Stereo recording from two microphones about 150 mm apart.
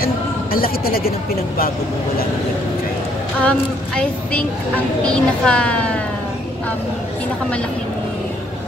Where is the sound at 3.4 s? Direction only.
10° left (ahead or behind).